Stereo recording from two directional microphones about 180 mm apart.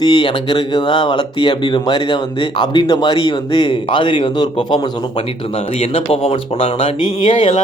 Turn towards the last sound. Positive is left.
turn(degrees=30)  # may be behind; listen again after turning